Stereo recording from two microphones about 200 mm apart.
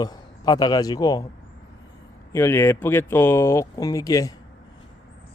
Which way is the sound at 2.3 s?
10° left (ahead or behind).